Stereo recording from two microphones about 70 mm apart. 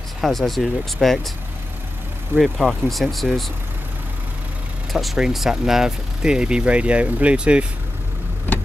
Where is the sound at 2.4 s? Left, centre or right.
Centre.